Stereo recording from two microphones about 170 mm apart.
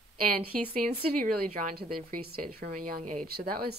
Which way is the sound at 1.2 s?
50° right (ahead or behind).